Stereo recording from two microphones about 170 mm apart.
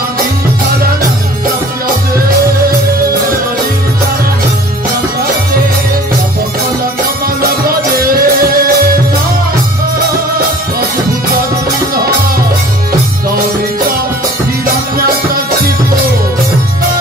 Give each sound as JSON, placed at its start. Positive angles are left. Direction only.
{"t": 7.6, "sound": "music", "side_deg": -60}